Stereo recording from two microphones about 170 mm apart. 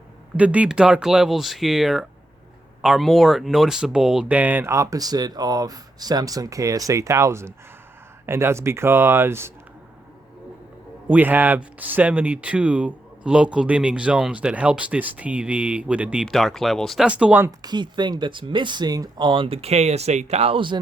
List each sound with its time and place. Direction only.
0.3 s speech: 10° right (ahead or behind)
11.1 s speech: 10° right (ahead or behind)
17.6 s speech: 25° right (ahead or behind)